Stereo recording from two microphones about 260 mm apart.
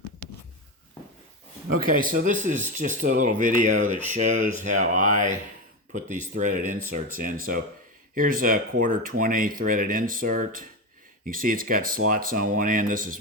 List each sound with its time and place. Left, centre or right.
1.9 s speech: right